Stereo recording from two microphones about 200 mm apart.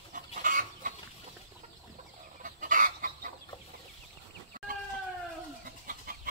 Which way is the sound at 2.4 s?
40° right (ahead or behind).